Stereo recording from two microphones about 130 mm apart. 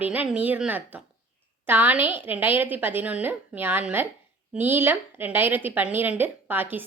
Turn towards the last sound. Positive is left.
turn(degrees=-15)  # may be behind; listen again after turning